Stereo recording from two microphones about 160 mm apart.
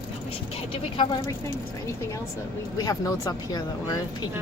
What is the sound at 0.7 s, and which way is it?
Speech, 35° left (ahead or behind).